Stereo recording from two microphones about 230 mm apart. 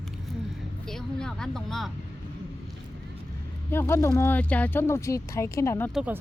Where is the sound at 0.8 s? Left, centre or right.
Centre.